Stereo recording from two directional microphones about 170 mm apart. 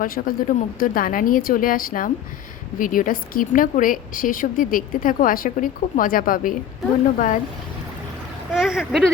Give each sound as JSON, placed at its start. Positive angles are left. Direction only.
{"t": 0.0, "sound": "a woman's voice", "side_deg": 55}
{"t": 8.5, "sound": "speech", "side_deg": -5}